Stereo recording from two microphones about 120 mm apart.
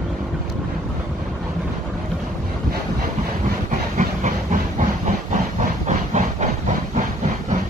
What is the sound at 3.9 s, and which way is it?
Steam, 90° right.